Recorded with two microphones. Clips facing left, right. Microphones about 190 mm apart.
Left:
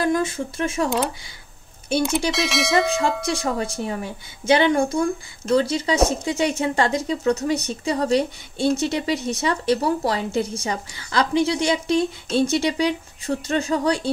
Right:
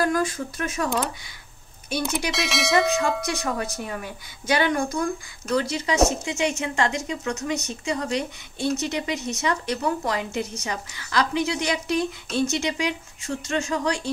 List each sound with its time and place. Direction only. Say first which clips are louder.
0.0 s speech: left 2 dB; 25° left (ahead or behind)
1.9 s speech: left 6 dB; 30° left (ahead or behind)
2.3 s a sound: left 2 dB; centre (ahead or behind)
3.3 s a woman's voice: left 3 dB; 30° left (ahead or behind)